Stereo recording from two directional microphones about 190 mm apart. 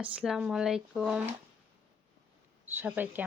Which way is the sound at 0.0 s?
5° right (ahead or behind).